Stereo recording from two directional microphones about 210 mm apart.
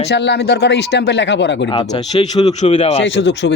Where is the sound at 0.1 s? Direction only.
55° left (ahead or behind).